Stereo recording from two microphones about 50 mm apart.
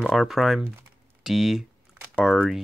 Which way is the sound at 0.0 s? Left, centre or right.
Centre.